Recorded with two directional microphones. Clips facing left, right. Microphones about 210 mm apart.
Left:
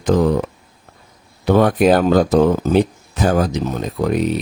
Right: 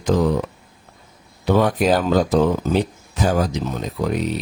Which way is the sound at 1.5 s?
55° left (ahead or behind).